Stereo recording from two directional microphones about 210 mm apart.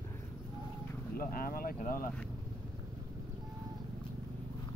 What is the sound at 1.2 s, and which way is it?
Speech, 45° left (ahead or behind).